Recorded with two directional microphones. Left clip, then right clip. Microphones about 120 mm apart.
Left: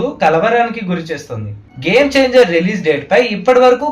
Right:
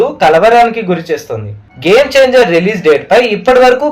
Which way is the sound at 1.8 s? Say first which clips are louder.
Right 5 dB; 40° right (ahead or behind).